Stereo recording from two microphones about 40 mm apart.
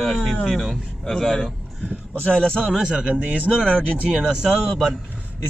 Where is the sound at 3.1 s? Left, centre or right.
Right.